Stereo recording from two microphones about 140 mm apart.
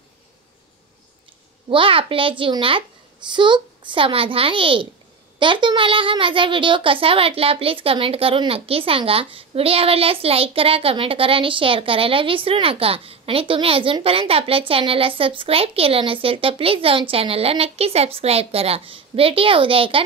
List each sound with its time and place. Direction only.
1.7 s a child's voice: 40° right (ahead or behind)